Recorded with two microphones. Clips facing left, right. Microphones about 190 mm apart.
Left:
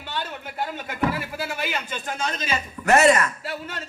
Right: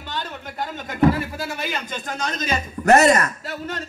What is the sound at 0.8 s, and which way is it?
Speech, 40° right (ahead or behind).